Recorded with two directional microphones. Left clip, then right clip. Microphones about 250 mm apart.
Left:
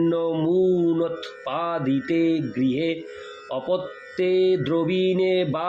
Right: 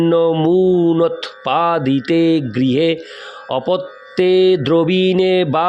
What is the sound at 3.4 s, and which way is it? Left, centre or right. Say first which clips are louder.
A man's voice: right 7 dB; right.